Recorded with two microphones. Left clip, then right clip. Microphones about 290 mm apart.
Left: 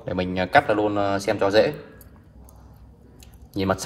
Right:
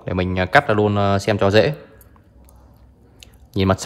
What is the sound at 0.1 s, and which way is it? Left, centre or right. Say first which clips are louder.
Speech: right 3 dB; right.